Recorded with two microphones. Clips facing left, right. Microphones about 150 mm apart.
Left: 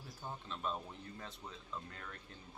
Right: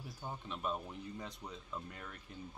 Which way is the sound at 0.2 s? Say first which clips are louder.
Right 1 dB; 10° right (ahead or behind).